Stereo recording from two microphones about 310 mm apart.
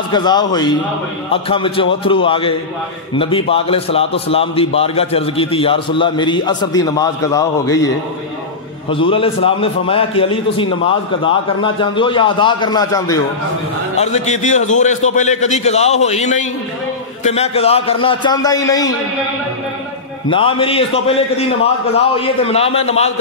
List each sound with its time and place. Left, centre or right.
0.1 s a man's voice: centre
8.9 s a man's voice: centre
13.9 s a man's voice: left
20.2 s a man's voice: centre